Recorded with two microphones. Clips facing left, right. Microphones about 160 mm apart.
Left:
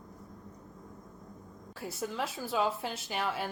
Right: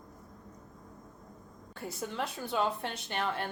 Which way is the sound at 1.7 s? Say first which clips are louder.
Left 1 dB; centre (ahead or behind).